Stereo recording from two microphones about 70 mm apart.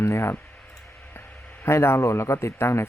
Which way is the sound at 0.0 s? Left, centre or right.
Left.